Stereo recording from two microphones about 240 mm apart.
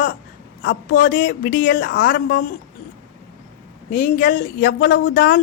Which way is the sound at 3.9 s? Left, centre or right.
Left.